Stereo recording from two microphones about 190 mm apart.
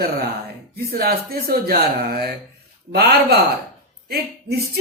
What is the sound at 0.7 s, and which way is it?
Speech, 55° right (ahead or behind).